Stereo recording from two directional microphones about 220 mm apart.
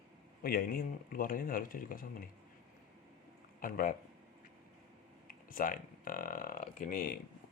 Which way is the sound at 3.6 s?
40° left (ahead or behind).